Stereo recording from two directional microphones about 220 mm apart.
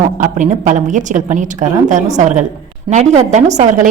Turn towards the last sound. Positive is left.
turn(degrees=-35)  # may be behind; listen again after turning